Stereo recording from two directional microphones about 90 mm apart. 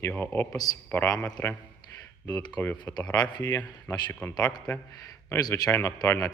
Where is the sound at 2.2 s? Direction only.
45° left (ahead or behind).